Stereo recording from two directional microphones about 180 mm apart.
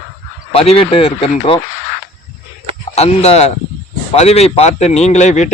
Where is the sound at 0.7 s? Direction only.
30° left (ahead or behind).